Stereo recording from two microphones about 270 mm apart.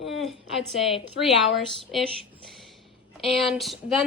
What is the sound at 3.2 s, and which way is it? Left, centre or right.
Speech, centre.